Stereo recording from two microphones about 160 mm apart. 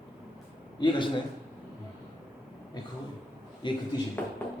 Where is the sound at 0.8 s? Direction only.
30° left (ahead or behind).